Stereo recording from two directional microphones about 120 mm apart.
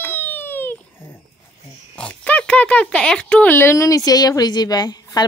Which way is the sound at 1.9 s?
10° left (ahead or behind).